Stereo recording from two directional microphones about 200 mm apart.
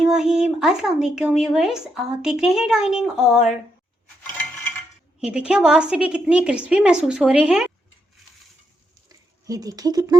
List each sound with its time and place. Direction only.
0.0 s speech: 5° right (ahead or behind)
5.2 s speech: 5° right (ahead or behind)
9.0 s a sound: 15° right (ahead or behind)